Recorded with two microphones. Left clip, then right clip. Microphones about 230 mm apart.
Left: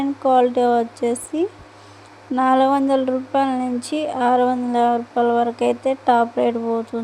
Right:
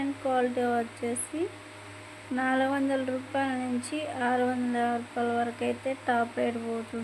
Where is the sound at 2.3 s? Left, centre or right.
Left.